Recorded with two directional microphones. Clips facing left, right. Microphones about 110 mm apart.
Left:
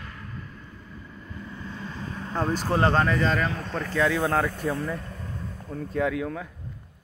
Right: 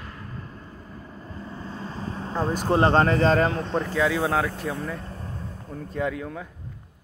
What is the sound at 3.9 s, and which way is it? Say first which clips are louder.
Speech: left 1 dB; 5° right (ahead or behind).